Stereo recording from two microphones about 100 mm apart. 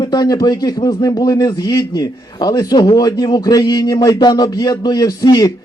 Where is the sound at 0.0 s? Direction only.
45° left (ahead or behind).